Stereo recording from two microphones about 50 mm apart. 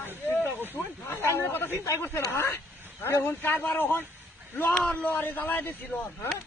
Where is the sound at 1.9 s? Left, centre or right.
Left.